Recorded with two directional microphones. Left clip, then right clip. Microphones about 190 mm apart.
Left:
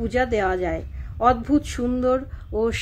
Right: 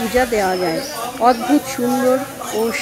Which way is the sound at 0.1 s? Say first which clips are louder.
Right 5 dB; 40° right (ahead or behind).